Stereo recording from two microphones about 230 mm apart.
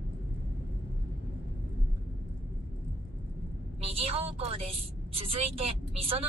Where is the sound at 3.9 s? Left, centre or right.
Right.